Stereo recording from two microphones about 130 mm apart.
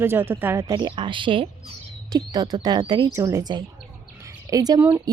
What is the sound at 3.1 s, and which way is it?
Speech, 25° right (ahead or behind).